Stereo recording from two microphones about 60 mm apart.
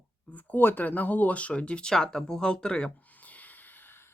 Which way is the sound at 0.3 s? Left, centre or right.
Left.